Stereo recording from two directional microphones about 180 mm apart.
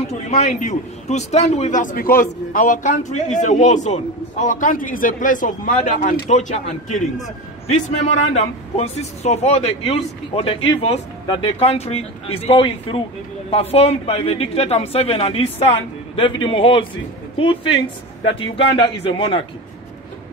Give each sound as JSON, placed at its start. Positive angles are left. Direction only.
{"t": 0.1, "sound": "a man's voice", "side_deg": 40}
{"t": 18.2, "sound": "a man's voice", "side_deg": 30}